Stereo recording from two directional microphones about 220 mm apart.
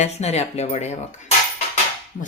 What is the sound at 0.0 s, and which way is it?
Speech, 30° left (ahead or behind).